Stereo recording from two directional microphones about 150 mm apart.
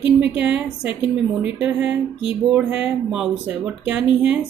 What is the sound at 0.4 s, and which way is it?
A woman's voice, 10° right (ahead or behind).